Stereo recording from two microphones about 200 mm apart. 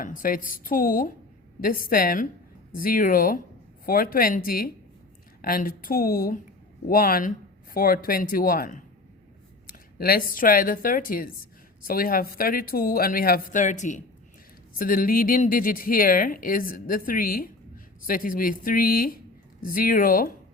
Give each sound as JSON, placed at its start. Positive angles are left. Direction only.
{"t": 0.0, "sound": "speech", "side_deg": 45}
{"t": 9.6, "sound": "a sound", "side_deg": 45}
{"t": 10.3, "sound": "speech", "side_deg": 45}